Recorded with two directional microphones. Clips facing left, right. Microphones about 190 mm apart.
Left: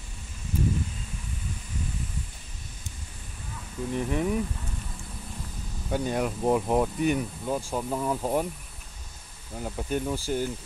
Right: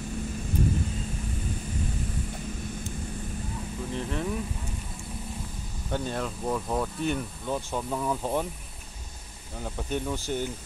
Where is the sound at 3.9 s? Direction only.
15° left (ahead or behind).